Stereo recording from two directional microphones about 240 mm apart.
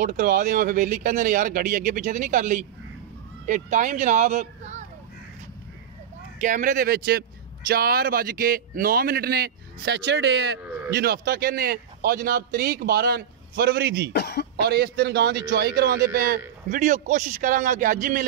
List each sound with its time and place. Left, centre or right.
0.0 s speech: right
6.4 s speech: right
14.1 s speech: left
14.6 s speech: right